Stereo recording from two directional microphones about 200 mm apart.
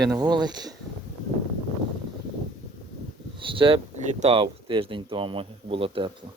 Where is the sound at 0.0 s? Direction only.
20° right (ahead or behind).